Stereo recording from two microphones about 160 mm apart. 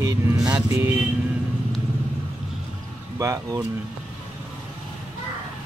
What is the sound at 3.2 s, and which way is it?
Speech, 20° right (ahead or behind).